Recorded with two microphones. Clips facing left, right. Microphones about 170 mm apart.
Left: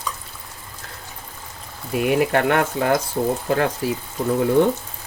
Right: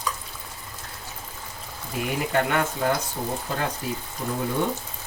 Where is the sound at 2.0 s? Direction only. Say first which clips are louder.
Left 7 dB; 65° left (ahead or behind).